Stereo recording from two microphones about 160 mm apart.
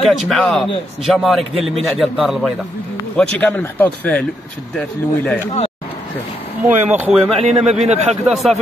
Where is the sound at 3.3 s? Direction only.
10° left (ahead or behind).